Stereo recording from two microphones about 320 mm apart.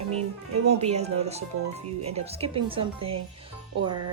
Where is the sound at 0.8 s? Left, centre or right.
Centre.